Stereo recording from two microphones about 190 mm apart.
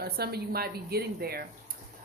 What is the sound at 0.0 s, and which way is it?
A woman's voice, 55° right (ahead or behind).